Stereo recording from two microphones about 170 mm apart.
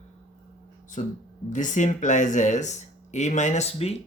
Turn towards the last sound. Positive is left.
turn(degrees=35)  # may be behind; listen again after turning